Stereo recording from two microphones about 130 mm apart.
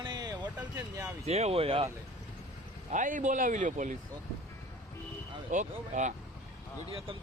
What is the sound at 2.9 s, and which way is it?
Speech, 80° right.